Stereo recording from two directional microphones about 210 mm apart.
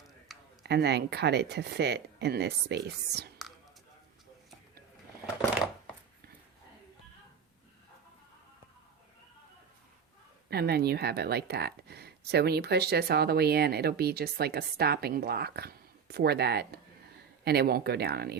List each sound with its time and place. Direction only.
0.6 s speech: 50° right (ahead or behind)
10.5 s speech: 50° right (ahead or behind)